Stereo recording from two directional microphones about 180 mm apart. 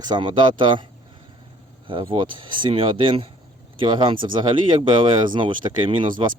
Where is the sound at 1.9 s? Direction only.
30° right (ahead or behind).